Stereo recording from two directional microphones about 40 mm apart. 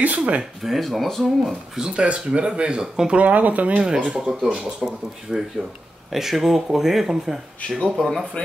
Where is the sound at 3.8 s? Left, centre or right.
Centre.